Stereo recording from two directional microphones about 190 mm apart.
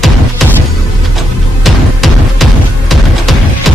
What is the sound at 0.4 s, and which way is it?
Music, centre (ahead or behind).